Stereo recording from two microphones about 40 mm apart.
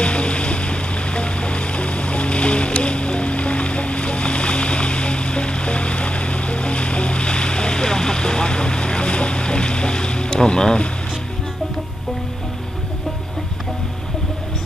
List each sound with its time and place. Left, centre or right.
0.0 s music: left